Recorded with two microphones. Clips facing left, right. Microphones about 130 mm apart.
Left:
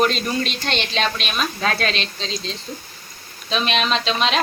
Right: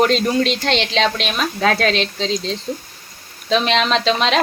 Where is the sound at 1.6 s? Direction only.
65° right (ahead or behind).